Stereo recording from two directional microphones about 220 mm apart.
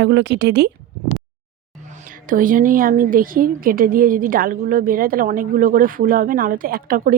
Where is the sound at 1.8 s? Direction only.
35° right (ahead or behind).